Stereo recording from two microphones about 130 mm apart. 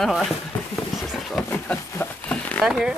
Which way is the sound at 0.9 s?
Centre (ahead or behind).